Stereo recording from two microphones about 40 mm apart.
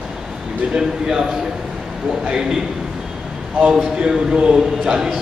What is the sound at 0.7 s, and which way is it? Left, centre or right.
Speech, centre.